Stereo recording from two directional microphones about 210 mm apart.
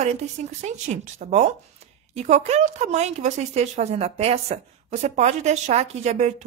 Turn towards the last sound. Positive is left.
turn(degrees=-30)  # may be behind; listen again after turning